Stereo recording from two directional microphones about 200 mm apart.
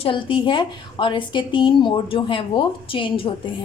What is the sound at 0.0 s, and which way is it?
A woman's voice, 25° left (ahead or behind).